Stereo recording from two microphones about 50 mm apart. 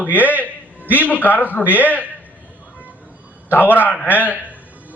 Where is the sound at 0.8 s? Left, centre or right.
Right.